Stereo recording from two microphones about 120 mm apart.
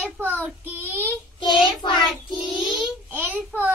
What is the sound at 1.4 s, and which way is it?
Child singing, 40° left (ahead or behind).